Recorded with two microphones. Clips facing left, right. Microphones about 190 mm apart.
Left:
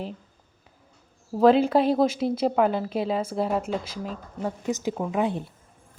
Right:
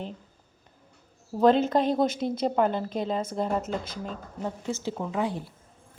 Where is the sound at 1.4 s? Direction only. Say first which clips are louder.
Left 3 dB; 5° left (ahead or behind); by 5.5 s 20° left (ahead or behind).